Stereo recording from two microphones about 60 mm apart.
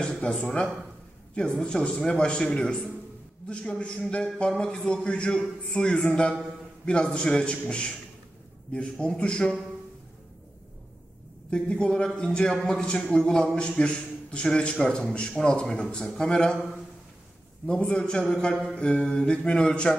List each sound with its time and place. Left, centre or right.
0.0 s a man's voice: centre
8.9 s a man's voice: centre
11.5 s a man's voice: centre
17.6 s a man's voice: centre